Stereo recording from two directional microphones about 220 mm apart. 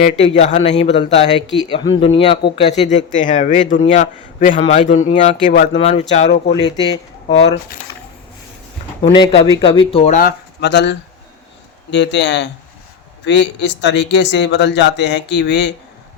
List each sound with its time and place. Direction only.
0.2 s a man's voice: 30° left (ahead or behind)
6.7 s a man's voice: 20° left (ahead or behind)
9.0 s speech: 20° left (ahead or behind)
10.2 s speech: 45° left (ahead or behind)